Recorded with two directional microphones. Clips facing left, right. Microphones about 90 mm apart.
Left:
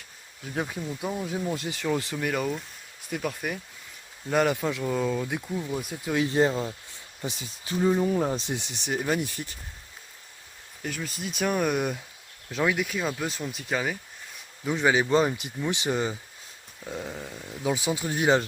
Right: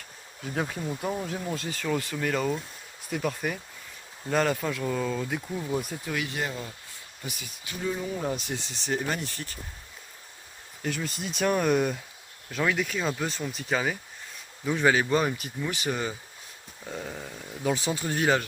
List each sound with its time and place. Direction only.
0.4 s speech: centre (ahead or behind)
1.5 s speech: 15° left (ahead or behind)
2.1 s speech: 10° left (ahead or behind)
4.3 s speech: 15° left (ahead or behind)
5.5 s speech: 5° right (ahead or behind)
6.1 s speech: 25° left (ahead or behind)
10.8 s speech: centre (ahead or behind)
12.5 s speech: 20° left (ahead or behind)
12.7 s speech: 5° left (ahead or behind)
14.6 s speech: 10° left (ahead or behind)
16.9 s speech: 10° left (ahead or behind)